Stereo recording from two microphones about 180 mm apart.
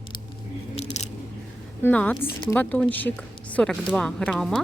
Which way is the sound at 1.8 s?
10° left (ahead or behind).